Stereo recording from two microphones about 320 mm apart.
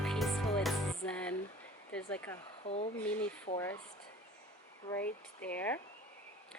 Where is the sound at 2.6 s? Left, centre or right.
Centre.